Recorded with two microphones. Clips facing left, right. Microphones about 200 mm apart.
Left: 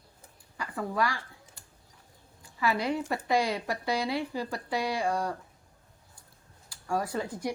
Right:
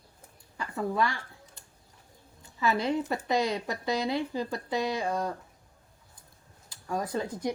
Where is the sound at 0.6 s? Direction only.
25° right (ahead or behind).